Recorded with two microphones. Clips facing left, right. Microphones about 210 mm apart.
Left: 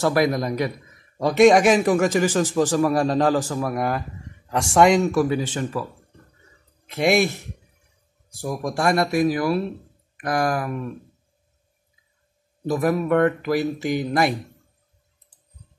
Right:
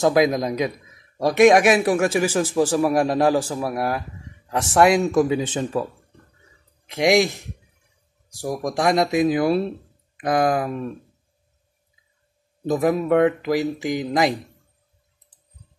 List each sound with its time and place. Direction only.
0.0 s a man's voice: 15° right (ahead or behind)
5.1 s speech: 20° right (ahead or behind)
6.9 s a man's voice: 15° right (ahead or behind)
8.4 s speech: 15° right (ahead or behind)
12.6 s a man's voice: 20° right (ahead or behind)